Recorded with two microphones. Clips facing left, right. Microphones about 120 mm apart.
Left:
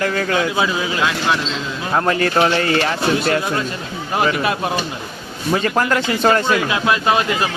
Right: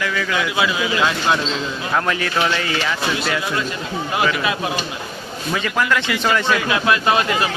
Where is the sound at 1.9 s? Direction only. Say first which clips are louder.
Left 4 dB; 35° left (ahead or behind).